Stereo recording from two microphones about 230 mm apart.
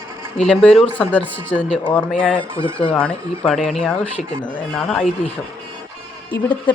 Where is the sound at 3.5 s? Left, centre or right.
Centre.